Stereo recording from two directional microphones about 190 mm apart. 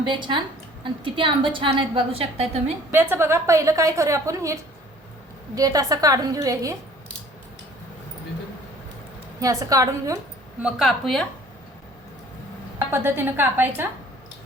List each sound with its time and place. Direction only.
0.0 s a woman's voice: 25° right (ahead or behind)
2.9 s a woman's voice: 10° right (ahead or behind)
5.5 s a woman's voice: 20° right (ahead or behind)
9.4 s a woman's voice: 15° right (ahead or behind)
10.6 s a woman's voice: centre (ahead or behind)
12.9 s a woman's voice: 10° right (ahead or behind)